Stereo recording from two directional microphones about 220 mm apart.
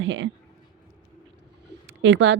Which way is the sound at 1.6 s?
55° right (ahead or behind).